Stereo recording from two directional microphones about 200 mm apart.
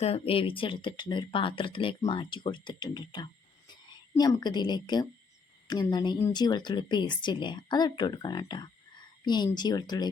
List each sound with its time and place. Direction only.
0.0 s speech: 30° left (ahead or behind)